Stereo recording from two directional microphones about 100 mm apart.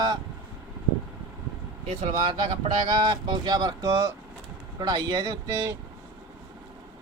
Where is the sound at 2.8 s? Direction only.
45° right (ahead or behind).